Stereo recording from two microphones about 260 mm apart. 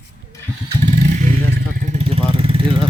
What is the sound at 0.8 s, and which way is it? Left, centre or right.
Vehicle, right.